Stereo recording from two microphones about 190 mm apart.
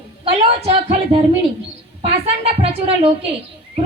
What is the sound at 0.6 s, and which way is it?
A woman's voice, 35° right (ahead or behind).